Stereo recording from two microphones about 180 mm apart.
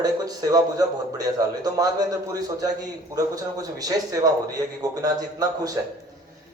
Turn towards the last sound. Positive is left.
turn(degrees=-20)  # may be behind; listen again after turning